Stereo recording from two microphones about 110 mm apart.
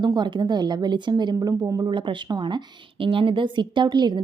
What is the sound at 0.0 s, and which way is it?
A woman's voice, 40° right (ahead or behind).